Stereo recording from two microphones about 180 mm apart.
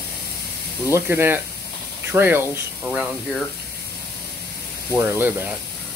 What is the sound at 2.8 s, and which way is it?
Speech, centre (ahead or behind).